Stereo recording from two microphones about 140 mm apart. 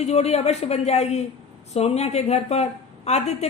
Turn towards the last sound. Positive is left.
turn(degrees=50)  # may be behind; listen again after turning